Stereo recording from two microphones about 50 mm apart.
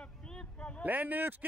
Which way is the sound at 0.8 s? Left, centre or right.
Right.